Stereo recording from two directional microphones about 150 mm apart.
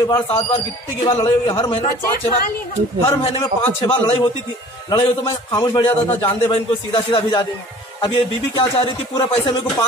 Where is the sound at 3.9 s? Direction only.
40° left (ahead or behind).